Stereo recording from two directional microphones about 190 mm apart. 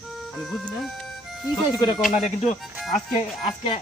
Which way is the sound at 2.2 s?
40° left (ahead or behind).